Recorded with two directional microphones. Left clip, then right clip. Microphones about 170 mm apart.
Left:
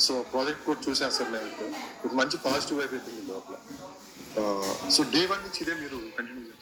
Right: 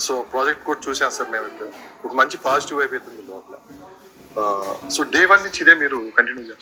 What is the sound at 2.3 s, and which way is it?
Speech, 45° right (ahead or behind).